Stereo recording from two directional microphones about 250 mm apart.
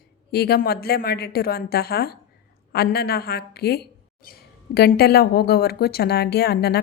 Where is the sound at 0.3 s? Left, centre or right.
Left.